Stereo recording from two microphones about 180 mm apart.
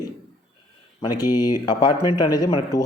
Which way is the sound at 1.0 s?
20° left (ahead or behind).